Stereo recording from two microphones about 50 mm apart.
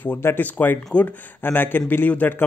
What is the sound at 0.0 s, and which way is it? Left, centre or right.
Speech, left.